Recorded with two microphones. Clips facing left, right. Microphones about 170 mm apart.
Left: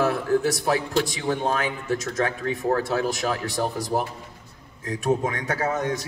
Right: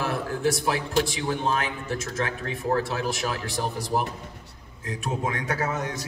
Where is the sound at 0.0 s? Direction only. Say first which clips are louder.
Left 4 dB; 40° left (ahead or behind).